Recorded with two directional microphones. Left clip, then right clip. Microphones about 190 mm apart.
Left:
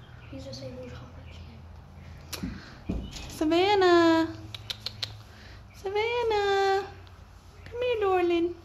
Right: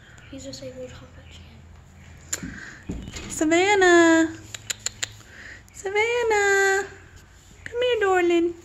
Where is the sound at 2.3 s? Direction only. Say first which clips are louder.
Right 5 dB; 35° right (ahead or behind).